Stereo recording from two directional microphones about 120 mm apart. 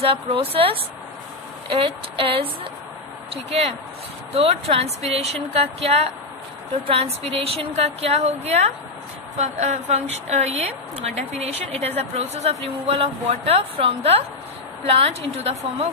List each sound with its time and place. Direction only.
0.0 s a woman's voice: 50° right (ahead or behind)
3.4 s a woman's voice: 60° right (ahead or behind)